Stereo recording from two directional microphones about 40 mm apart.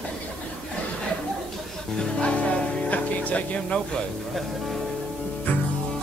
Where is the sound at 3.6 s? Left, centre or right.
Left.